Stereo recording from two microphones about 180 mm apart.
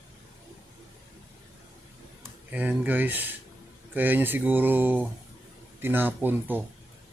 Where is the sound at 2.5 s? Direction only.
10° right (ahead or behind).